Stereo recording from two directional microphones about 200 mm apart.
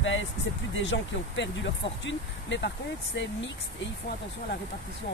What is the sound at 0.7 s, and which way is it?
Speech, 65° left (ahead or behind).